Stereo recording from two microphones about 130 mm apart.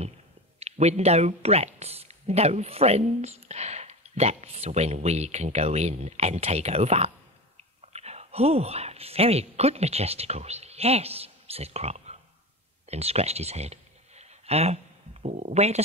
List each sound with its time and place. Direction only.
0.6 s speech: 55° right (ahead or behind)
12.8 s a sound: 55° right (ahead or behind)
15.2 s speech: 60° right (ahead or behind)